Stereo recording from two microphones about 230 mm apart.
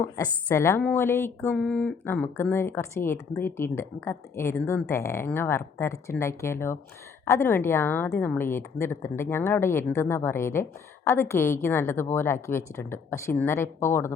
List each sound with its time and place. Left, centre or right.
0.4 s a woman's voice: centre